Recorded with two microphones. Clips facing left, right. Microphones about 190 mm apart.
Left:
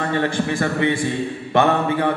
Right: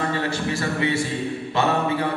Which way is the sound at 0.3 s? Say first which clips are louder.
Left 4 dB; 55° left (ahead or behind).